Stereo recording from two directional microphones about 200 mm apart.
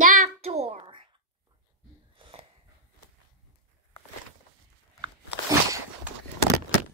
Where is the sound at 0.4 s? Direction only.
30° right (ahead or behind).